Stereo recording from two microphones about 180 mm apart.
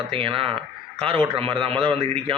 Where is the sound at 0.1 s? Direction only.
30° right (ahead or behind).